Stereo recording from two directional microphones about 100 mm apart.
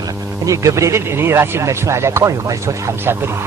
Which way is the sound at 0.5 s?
30° right (ahead or behind).